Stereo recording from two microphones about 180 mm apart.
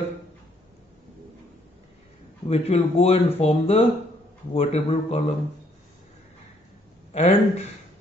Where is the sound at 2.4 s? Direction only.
35° left (ahead or behind).